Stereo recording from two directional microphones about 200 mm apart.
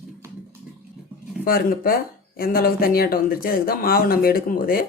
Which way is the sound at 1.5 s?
45° left (ahead or behind).